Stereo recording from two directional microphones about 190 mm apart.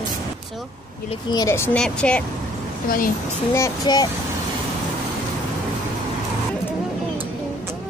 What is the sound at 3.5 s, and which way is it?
Speech, 20° left (ahead or behind).